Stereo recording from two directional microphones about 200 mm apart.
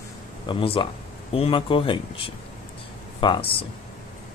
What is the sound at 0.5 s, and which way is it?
Speech, 25° left (ahead or behind).